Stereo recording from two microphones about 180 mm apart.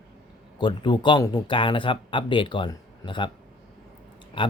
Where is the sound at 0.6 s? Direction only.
25° left (ahead or behind).